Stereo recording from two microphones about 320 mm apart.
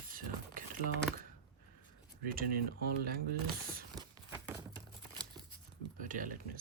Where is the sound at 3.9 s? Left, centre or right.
Centre.